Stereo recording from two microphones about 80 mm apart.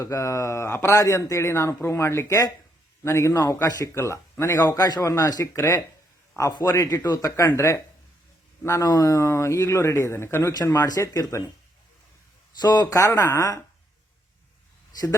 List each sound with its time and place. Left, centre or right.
0.0 s speech: left
3.9 s a man's voice: left
8.8 s speech: left
10.5 s a man's voice: left
12.6 s a man's voice: left